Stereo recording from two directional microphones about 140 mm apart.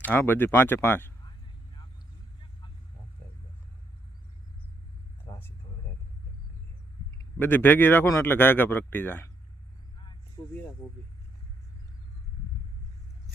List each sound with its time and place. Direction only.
0.0 s speech: 15° left (ahead or behind)
5.3 s a sound: 20° left (ahead or behind)
7.3 s speech: 15° left (ahead or behind)
10.4 s speech: 25° left (ahead or behind)